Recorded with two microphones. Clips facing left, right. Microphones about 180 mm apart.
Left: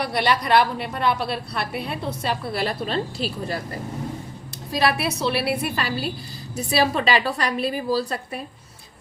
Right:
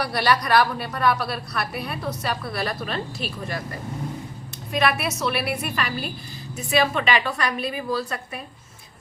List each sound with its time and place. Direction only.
0.0 s a woman's voice: 25° left (ahead or behind)